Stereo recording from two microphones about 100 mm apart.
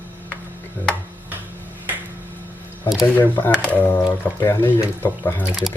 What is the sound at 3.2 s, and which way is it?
Speech, 20° left (ahead or behind).